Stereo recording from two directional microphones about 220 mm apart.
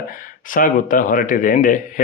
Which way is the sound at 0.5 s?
35° left (ahead or behind).